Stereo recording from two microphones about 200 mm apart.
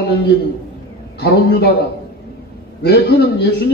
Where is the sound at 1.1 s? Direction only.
50° left (ahead or behind).